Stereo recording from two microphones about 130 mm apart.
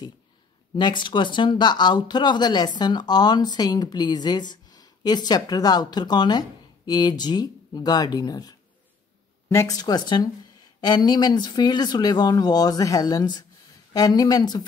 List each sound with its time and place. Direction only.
0.7 s speech: 35° left (ahead or behind)